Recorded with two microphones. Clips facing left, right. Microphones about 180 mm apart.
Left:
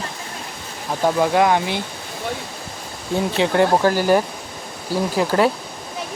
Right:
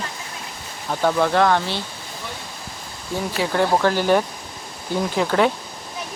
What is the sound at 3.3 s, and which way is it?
Speech, 20° left (ahead or behind).